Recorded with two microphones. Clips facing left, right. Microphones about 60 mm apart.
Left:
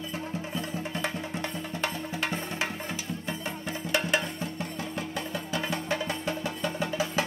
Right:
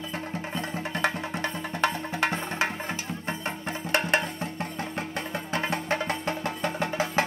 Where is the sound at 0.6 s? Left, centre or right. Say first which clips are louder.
Right 5 dB; right.